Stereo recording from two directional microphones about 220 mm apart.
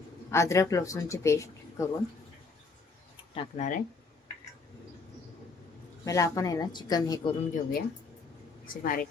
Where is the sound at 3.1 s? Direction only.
30° left (ahead or behind).